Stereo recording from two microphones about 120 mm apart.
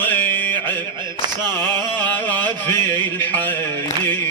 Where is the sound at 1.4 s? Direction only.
35° right (ahead or behind).